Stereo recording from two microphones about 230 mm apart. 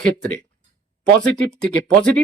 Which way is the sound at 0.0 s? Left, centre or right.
Centre.